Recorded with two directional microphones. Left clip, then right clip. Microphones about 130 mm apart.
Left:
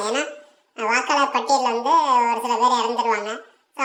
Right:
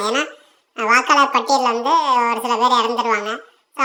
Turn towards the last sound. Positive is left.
turn(degrees=-25)  # may be behind; listen again after turning